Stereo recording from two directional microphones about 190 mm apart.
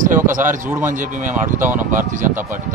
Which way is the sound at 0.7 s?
10° right (ahead or behind).